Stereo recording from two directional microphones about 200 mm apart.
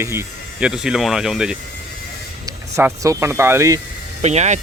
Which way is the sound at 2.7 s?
15° right (ahead or behind).